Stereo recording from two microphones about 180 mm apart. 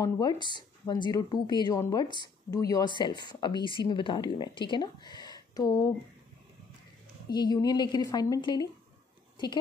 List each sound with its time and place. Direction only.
0.0 s speech: 20° left (ahead or behind)
7.2 s speech: 25° left (ahead or behind)